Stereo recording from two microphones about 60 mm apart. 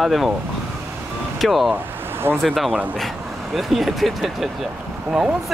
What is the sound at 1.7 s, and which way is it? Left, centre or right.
Speech, right.